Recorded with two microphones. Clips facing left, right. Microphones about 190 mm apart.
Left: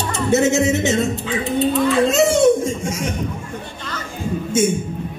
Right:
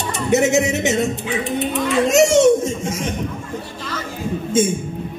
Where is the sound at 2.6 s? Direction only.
25° right (ahead or behind).